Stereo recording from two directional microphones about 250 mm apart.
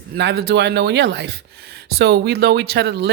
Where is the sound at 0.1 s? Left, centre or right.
Right.